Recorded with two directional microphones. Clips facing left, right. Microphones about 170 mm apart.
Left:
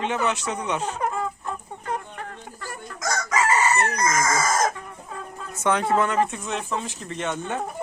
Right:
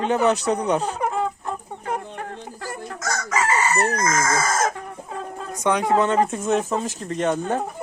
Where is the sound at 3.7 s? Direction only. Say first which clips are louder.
Right 2 dB; 35° right (ahead or behind).